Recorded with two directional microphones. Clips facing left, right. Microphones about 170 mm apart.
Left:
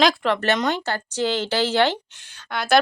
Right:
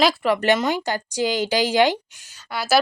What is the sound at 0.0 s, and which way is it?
Speech, 5° right (ahead or behind).